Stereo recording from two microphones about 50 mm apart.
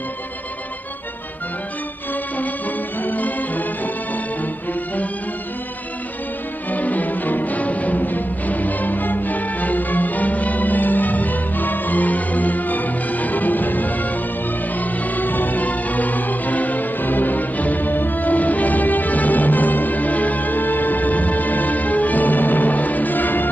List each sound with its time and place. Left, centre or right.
3.0 s music: left
6.7 s music: left